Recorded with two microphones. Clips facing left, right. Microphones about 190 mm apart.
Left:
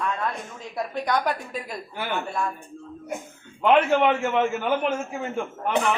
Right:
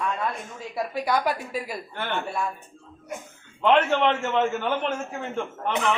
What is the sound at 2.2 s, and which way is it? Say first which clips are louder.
Speech: left 1 dB; 5° right (ahead or behind).